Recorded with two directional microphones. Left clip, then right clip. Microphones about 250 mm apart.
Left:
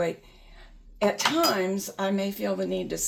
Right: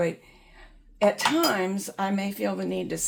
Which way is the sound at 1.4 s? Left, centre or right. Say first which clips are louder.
Even; right.